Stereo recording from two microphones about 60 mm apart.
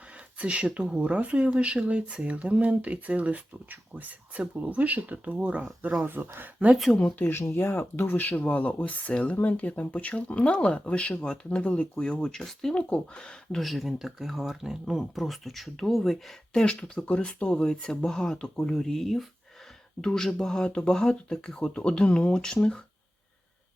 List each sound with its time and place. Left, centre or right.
0.1 s speech: right
6.1 s speech: right
7.2 s speech: left; by 12.7 s centre
12.7 s speech: centre
13.6 s speech: centre
16.5 s speech: centre